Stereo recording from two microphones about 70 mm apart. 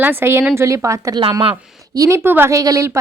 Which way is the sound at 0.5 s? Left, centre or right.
Right.